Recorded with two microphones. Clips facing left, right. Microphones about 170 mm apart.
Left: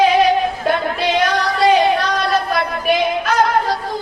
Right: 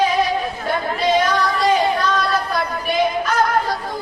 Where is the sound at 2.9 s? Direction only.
75° left (ahead or behind).